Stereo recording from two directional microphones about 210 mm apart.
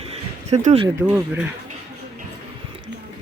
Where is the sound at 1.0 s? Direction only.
10° right (ahead or behind).